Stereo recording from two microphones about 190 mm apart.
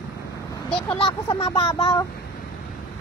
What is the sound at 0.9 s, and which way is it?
Speech, 25° left (ahead or behind).